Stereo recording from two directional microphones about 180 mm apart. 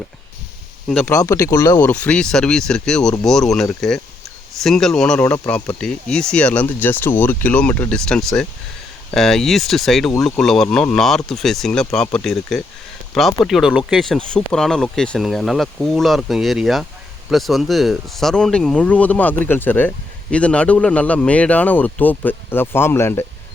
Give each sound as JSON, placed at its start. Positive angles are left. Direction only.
{"t": 1.0, "sound": "speech", "side_deg": 15}
{"t": 1.8, "sound": "speech", "side_deg": 10}